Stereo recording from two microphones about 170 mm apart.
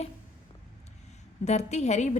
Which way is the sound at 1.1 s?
40° left (ahead or behind).